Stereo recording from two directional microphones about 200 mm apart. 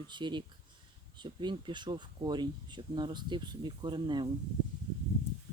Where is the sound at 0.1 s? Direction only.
25° right (ahead or behind).